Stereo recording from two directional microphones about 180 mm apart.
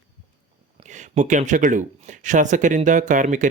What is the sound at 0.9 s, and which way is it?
Speech, 40° right (ahead or behind).